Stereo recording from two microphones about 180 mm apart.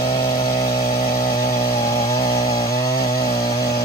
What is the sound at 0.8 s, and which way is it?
Chainsaw, 55° left (ahead or behind).